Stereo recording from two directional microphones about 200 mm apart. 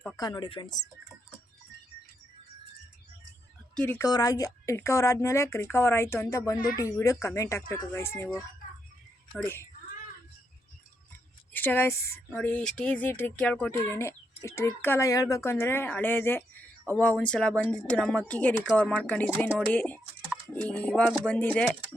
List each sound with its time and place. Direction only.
0.2 s speech: 20° left (ahead or behind)
3.8 s speech: 10° left (ahead or behind)
9.3 s speech: 10° left (ahead or behind)
11.5 s speech: 10° left (ahead or behind)